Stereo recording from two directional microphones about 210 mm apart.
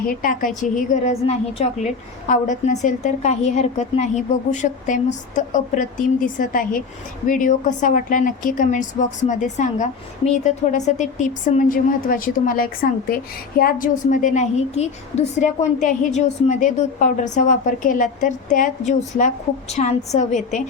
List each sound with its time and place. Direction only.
0.1 s a woman's voice: 40° left (ahead or behind)